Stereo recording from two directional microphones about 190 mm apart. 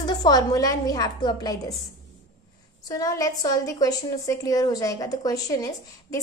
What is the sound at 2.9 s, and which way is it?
A woman's voice, 15° left (ahead or behind).